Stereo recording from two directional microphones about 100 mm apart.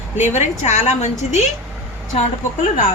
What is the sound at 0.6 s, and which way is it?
Speech, 90° left.